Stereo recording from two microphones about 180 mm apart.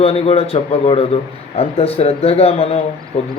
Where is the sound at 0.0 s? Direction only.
35° left (ahead or behind).